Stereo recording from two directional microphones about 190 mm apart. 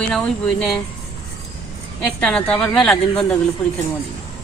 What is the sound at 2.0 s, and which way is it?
A woman's voice, 5° left (ahead or behind).